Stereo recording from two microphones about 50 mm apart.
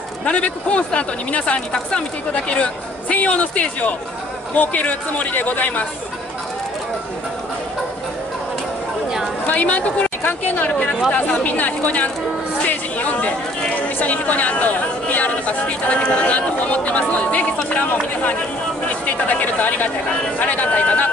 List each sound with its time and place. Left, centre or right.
0.2 s a woman's voice: left
9.5 s a woman's voice: left
19.4 s speech: left